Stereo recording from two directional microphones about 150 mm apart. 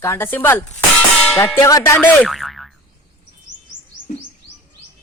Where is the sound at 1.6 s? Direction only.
20° left (ahead or behind).